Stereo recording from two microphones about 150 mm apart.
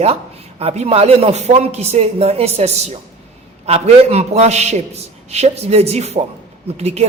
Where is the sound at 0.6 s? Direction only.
45° right (ahead or behind).